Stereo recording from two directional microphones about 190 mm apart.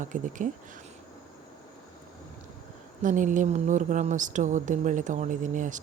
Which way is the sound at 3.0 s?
40° right (ahead or behind).